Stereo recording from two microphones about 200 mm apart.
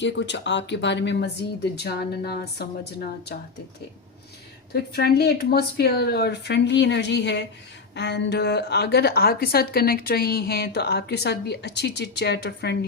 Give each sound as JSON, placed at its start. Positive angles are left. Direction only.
{"t": 0.0, "sound": "a woman's voice", "side_deg": 65}
{"t": 4.7, "sound": "a woman's voice", "side_deg": 50}